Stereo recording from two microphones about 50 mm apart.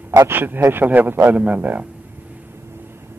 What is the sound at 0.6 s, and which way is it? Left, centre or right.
Speech, right.